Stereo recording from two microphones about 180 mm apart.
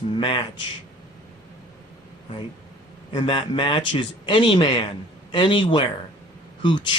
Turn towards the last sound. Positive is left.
turn(degrees=25)  # may be behind; listen again after turning